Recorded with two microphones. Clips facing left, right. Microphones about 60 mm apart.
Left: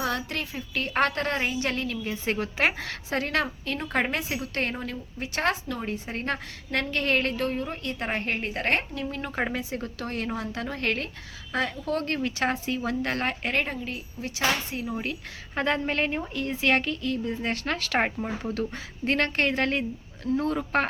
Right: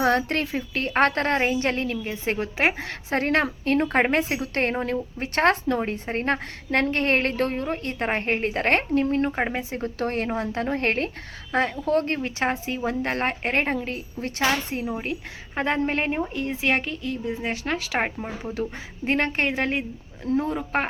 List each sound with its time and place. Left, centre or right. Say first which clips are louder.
0.0 s a woman's voice: right 7 dB; right
13.7 s a woman's voice: right 5 dB; right
15.0 s a woman's voice: right 3 dB; right